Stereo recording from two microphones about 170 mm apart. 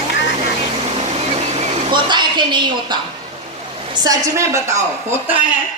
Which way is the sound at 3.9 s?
20° right (ahead or behind).